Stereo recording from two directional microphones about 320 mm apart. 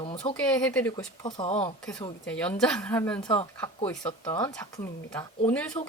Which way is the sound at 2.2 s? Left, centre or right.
Centre.